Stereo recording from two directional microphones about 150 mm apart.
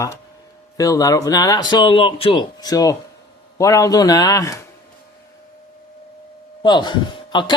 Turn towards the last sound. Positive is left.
turn(degrees=30)  # may be behind; listen again after turning